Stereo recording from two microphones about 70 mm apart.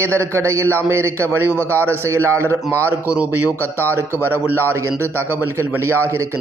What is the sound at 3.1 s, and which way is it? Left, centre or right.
Speech, right.